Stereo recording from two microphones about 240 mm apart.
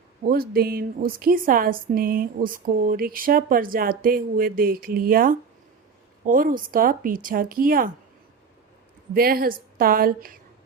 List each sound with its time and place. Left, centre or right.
0.2 s a woman's voice: right
9.1 s a woman's voice: right